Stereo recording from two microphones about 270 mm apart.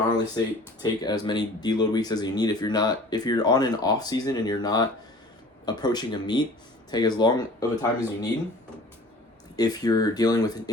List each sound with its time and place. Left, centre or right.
0.3 s speech: centre
9.6 s speech: centre